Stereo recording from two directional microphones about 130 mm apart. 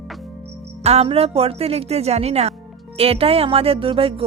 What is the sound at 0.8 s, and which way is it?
Speech, 50° right (ahead or behind).